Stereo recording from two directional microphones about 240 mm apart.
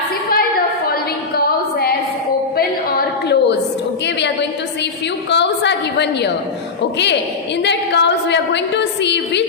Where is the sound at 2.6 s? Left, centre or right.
Left.